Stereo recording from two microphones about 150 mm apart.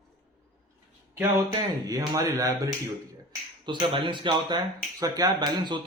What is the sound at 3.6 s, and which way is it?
A man's voice, 30° right (ahead or behind).